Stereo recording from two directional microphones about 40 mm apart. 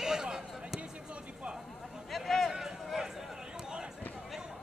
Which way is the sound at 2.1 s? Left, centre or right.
Centre.